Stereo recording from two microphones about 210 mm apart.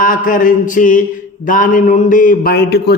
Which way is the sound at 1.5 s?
40° left (ahead or behind).